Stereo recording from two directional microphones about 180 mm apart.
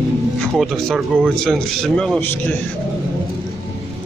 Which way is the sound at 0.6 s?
Centre (ahead or behind).